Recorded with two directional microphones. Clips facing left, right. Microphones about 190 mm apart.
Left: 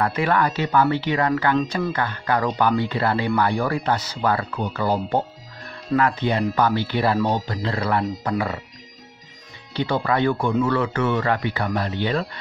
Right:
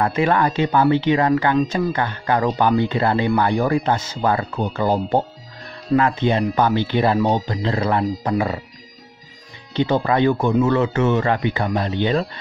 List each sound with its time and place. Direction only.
0.0 s speech: 25° right (ahead or behind)
5.9 s speech: 25° right (ahead or behind)
10.0 s speech: 25° right (ahead or behind)